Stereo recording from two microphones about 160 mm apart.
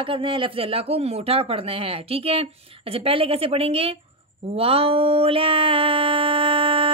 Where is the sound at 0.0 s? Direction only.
35° right (ahead or behind).